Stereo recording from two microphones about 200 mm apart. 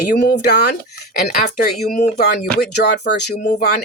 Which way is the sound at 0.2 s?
60° left (ahead or behind).